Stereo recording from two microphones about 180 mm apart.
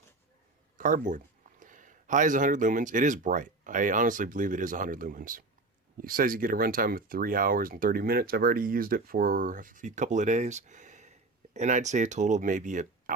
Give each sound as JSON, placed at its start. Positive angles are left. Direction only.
{"t": 0.8, "sound": "speech", "side_deg": -45}